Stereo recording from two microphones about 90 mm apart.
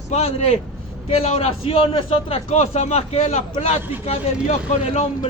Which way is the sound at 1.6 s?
90° left.